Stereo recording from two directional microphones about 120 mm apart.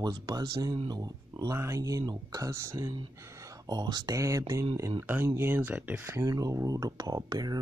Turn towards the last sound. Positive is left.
turn(degrees=-35)  # may be behind; listen again after turning